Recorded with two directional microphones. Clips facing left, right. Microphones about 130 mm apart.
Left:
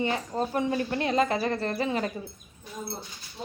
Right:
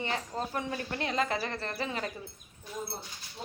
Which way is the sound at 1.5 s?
40° left (ahead or behind).